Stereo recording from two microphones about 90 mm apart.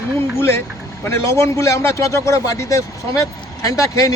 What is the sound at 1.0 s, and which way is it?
Speech, 30° left (ahead or behind).